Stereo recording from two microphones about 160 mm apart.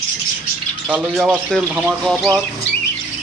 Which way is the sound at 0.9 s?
5° right (ahead or behind).